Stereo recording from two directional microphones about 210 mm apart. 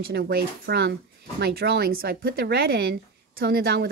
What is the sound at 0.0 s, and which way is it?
Speech, 45° right (ahead or behind).